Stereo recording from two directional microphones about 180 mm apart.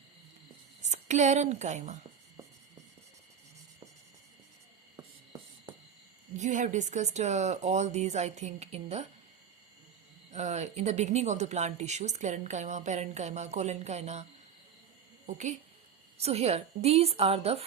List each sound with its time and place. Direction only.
0.8 s a woman's voice: 40° right (ahead or behind)
4.9 s a sound: 20° right (ahead or behind)
6.3 s speech: 40° right (ahead or behind)
10.3 s speech: 40° right (ahead or behind)
15.3 s a woman's voice: 40° right (ahead or behind)